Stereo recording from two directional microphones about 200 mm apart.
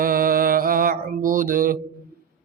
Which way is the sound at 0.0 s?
45° right (ahead or behind).